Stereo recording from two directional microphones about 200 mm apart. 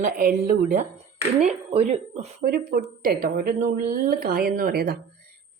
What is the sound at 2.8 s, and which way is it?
Speech, 45° right (ahead or behind).